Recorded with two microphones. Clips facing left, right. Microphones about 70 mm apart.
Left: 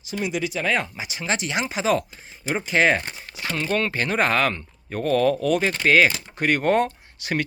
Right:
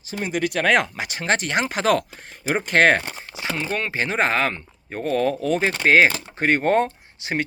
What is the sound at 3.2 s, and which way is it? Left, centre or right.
Speech, right.